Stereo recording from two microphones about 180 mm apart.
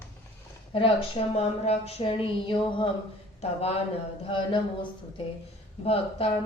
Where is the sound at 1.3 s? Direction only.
35° left (ahead or behind).